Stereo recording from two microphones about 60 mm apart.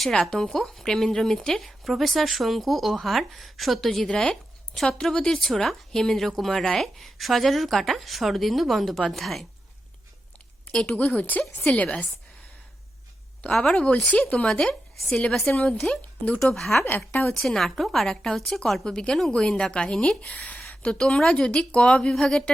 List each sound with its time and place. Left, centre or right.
0.0 s a woman's voice: centre
10.7 s a woman's voice: centre
10.9 s speech: left
13.5 s a woman's voice: centre
13.7 s a woman's voice: centre
16.6 s a woman's voice: centre
17.1 s speech: left
17.3 s a woman's voice: centre